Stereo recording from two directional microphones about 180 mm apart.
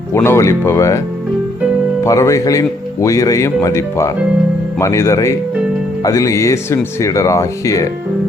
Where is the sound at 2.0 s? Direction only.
15° left (ahead or behind).